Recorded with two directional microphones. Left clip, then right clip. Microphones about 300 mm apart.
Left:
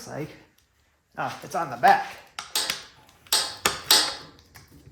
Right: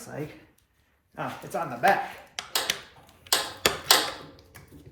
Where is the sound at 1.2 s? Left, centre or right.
Centre.